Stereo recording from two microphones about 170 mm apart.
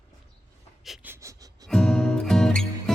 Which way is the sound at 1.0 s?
15° right (ahead or behind).